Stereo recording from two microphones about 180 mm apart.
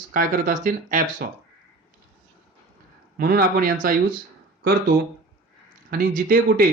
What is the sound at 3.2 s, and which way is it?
Speech, 55° right (ahead or behind).